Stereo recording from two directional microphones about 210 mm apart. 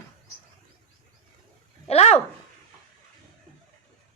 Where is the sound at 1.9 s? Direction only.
30° left (ahead or behind).